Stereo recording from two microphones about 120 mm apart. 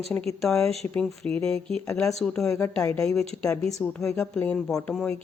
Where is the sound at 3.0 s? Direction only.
5° left (ahead or behind).